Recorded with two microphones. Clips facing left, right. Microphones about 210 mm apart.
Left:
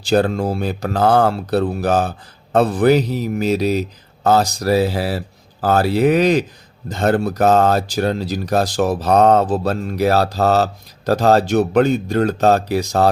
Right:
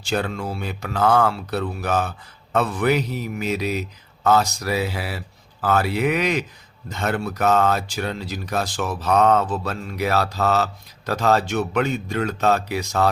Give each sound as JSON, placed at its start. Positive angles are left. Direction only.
{"t": 0.0, "sound": "speech", "side_deg": 35}